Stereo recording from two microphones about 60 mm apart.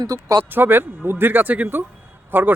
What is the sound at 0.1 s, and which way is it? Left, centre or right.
Speech, right.